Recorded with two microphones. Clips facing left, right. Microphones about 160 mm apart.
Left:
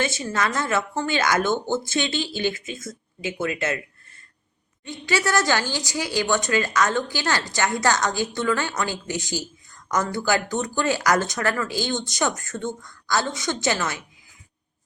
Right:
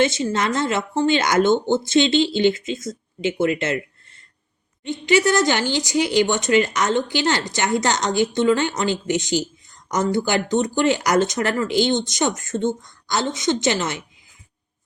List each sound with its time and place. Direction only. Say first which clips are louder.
0.0 s speech: right 5 dB; 20° right (ahead or behind)